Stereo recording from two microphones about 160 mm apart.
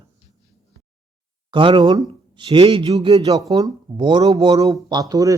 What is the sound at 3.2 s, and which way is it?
Speech, 20° right (ahead or behind).